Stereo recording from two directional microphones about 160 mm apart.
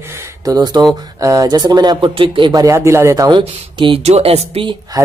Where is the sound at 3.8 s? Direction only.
35° right (ahead or behind).